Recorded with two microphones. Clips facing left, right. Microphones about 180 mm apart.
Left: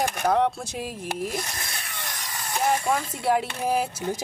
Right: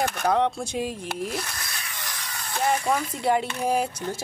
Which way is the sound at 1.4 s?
25° left (ahead or behind).